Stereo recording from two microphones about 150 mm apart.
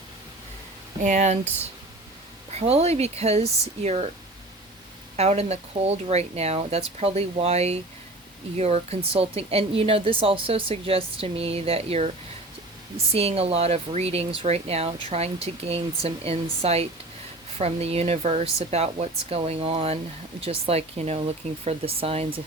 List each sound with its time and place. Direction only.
1.0 s speech: 50° right (ahead or behind)
2.5 s speech: 45° right (ahead or behind)
5.1 s speech: 45° right (ahead or behind)